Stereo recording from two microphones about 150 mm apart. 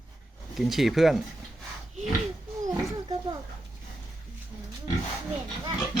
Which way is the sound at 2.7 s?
25° right (ahead or behind).